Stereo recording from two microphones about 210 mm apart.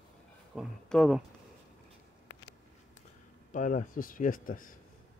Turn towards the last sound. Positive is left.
turn(degrees=40)  # may be behind; listen again after turning